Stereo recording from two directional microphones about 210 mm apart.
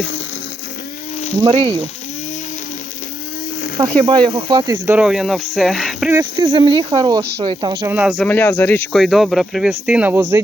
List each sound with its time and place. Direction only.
3.8 s speech: 20° right (ahead or behind)
4.9 s speech: 5° right (ahead or behind)
6.1 s speech: 20° right (ahead or behind)
7.2 s speech: 50° right (ahead or behind)
7.4 s speech: 25° right (ahead or behind)
7.9 s speech: 5° right (ahead or behind)
8.3 s speech: 10° left (ahead or behind); by 10.4 s 15° right (ahead or behind)